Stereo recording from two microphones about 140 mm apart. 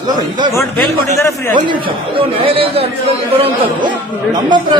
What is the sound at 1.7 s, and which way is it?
A man's voice, 40° right (ahead or behind).